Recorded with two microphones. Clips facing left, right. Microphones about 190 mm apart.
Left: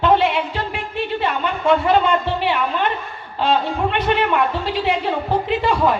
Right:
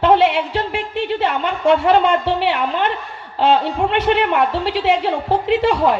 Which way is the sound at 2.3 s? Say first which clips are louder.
Right 2 dB; 70° right (ahead or behind).